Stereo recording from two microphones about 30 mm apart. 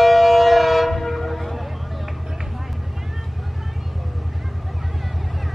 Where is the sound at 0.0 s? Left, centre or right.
Centre.